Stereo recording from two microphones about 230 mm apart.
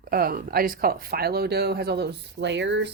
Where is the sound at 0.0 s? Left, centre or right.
Right.